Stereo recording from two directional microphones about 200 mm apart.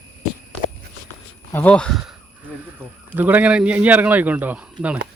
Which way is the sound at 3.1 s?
10° right (ahead or behind).